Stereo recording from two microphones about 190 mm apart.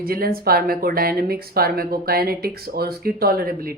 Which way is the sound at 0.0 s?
50° right (ahead or behind).